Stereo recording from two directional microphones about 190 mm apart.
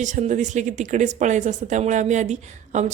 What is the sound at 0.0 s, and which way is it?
Speech, 40° right (ahead or behind).